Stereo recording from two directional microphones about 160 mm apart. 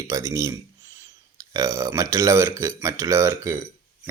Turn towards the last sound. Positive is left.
turn(degrees=-15)  # may be behind; listen again after turning